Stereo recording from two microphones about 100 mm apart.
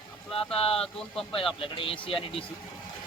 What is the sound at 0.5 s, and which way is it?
Speech, 75° left (ahead or behind).